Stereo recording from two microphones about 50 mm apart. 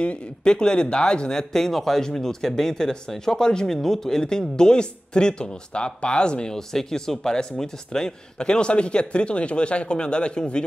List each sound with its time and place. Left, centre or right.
0.0 s speech: left